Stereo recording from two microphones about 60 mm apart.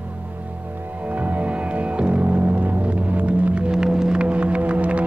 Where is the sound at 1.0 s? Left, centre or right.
Right.